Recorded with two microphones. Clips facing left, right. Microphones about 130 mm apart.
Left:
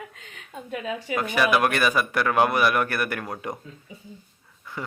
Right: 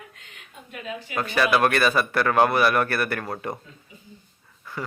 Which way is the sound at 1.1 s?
15° left (ahead or behind).